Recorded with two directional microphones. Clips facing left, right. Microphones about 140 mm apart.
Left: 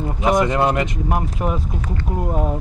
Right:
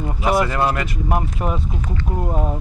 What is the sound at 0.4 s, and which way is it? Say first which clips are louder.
Speech: left 2 dB; 20° left (ahead or behind).